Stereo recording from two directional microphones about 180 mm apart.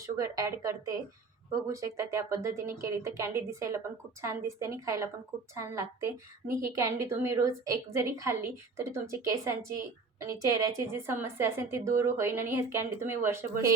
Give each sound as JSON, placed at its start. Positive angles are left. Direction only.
{"t": 0.0, "sound": "a woman's voice", "side_deg": -20}